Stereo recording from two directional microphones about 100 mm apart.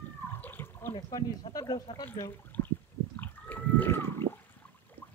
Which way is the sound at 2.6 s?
25° left (ahead or behind).